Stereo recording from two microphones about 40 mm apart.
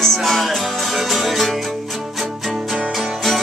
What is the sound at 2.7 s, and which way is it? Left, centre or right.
Music, centre.